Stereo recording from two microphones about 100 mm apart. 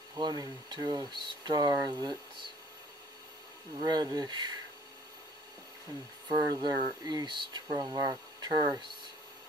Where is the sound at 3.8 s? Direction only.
45° right (ahead or behind).